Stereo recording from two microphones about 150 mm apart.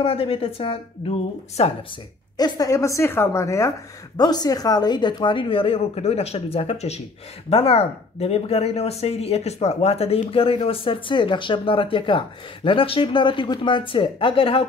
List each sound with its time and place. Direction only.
0.0 s speech: 40° left (ahead or behind)
2.3 s a woman's voice: 25° left (ahead or behind)